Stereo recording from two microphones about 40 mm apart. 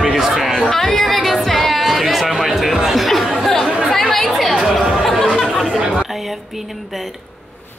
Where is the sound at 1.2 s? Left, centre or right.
Centre.